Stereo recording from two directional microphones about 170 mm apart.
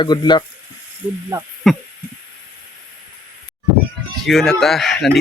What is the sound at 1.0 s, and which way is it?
Speech, 10° right (ahead or behind).